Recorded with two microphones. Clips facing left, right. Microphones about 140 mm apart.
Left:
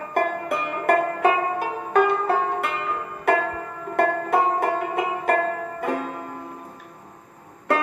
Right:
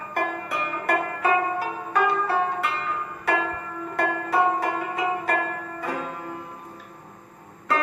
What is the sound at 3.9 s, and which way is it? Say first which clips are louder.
Music: left 3 dB; 55° left (ahead or behind).